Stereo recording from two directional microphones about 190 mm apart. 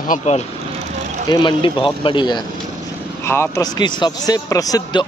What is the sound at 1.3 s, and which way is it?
Speech, 25° left (ahead or behind).